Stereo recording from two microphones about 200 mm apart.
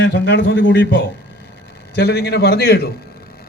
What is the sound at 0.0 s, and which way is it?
A man's voice, 60° left (ahead or behind).